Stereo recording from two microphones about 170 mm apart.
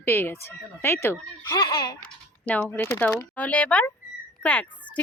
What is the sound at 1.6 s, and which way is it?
Speech, 25° left (ahead or behind).